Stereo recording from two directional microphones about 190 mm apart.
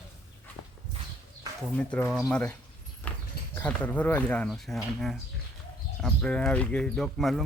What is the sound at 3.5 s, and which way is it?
Speech, 10° left (ahead or behind).